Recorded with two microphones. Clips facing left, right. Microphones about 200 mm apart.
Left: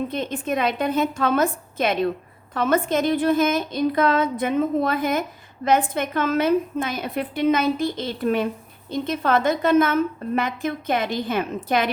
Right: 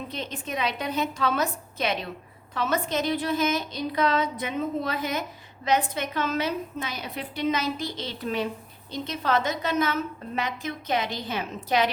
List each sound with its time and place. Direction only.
0.1 s a woman's voice: 50° left (ahead or behind)